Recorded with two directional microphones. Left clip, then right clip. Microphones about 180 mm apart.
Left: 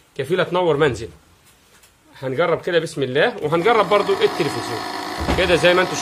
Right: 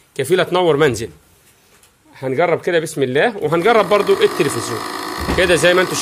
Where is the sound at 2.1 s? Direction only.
35° right (ahead or behind).